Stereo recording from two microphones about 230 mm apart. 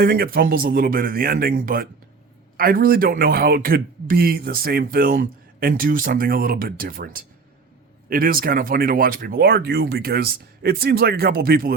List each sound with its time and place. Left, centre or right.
0.0 s a man's voice: right